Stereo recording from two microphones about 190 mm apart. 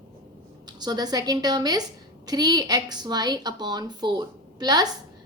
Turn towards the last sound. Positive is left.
turn(degrees=-20)  # may be behind; listen again after turning